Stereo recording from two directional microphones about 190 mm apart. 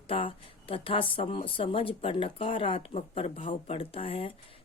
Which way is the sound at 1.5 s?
30° left (ahead or behind).